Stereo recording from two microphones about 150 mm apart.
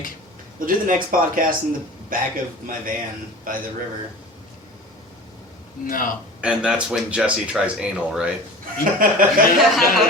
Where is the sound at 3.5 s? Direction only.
70° right (ahead or behind).